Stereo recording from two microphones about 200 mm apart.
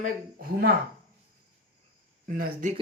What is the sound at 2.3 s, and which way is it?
Speech, 45° right (ahead or behind).